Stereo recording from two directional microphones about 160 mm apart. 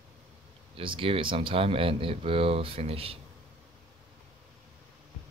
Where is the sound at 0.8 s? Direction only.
35° right (ahead or behind).